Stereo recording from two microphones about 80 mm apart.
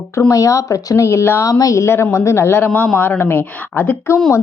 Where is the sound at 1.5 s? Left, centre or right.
Left.